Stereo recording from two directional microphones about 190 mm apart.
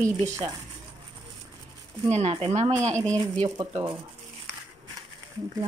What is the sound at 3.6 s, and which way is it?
Speech, 20° right (ahead or behind).